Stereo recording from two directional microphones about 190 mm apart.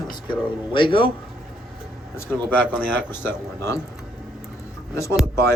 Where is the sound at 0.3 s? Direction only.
25° left (ahead or behind).